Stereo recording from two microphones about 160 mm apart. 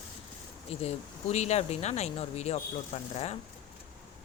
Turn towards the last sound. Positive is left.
turn(degrees=40)  # may be behind; listen again after turning